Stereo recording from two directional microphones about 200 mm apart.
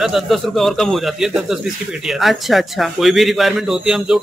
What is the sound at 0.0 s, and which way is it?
A man's voice, centre (ahead or behind).